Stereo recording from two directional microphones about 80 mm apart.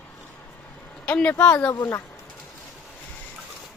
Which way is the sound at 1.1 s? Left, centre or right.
Centre.